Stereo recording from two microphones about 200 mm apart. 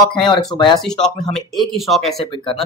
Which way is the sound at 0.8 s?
5° left (ahead or behind).